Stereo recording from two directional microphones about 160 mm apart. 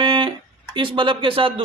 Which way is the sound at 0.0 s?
30° right (ahead or behind).